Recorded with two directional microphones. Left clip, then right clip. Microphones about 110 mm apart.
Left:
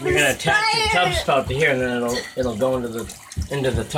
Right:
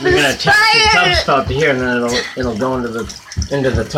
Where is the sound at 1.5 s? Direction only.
30° left (ahead or behind).